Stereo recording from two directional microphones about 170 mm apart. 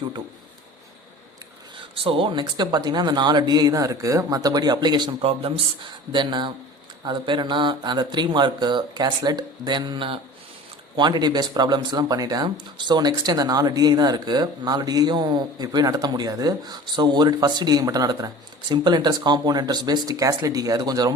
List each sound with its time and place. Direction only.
2.0 s speech: 30° right (ahead or behind)